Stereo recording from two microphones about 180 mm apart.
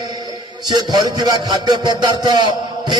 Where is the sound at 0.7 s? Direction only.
20° right (ahead or behind).